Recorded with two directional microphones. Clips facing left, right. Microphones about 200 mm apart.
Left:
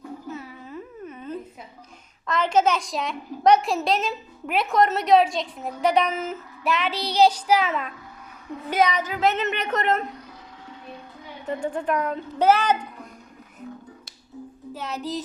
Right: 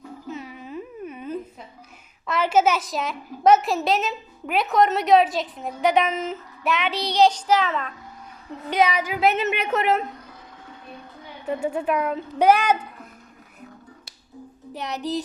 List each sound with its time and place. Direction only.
0.3 s a sound: 15° right (ahead or behind)
2.2 s a woman's voice: 10° right (ahead or behind); by 7.9 s 10° left (ahead or behind)
8.9 s a child's voice: 10° right (ahead or behind)
11.4 s a child's voice: 10° right (ahead or behind)
14.7 s a child's voice: 20° right (ahead or behind)